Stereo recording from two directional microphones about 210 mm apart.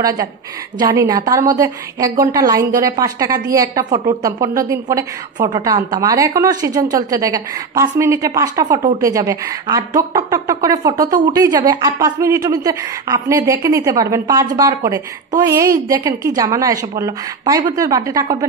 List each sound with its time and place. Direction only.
0.0 s a woman's voice: 15° right (ahead or behind)